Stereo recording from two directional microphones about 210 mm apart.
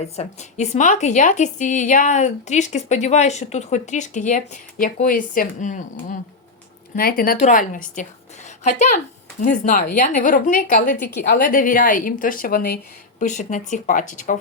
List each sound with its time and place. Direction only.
0.2 s a woman's voice: 35° left (ahead or behind)
9.4 s a woman's voice: 40° left (ahead or behind)
13.2 s a woman's voice: 35° left (ahead or behind)